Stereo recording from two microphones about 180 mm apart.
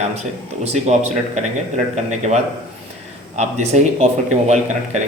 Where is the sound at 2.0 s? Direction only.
40° right (ahead or behind).